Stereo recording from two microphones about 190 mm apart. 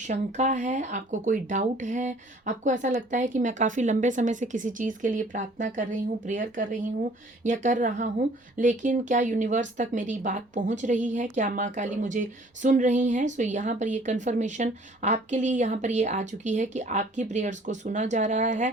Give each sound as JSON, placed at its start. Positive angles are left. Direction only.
{"t": 0.0, "sound": "speech", "side_deg": -35}